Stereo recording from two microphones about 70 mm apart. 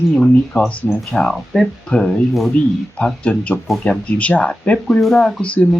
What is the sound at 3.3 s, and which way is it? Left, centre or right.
Speech, centre.